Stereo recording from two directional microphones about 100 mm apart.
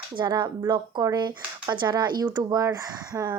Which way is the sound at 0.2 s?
50° right (ahead or behind).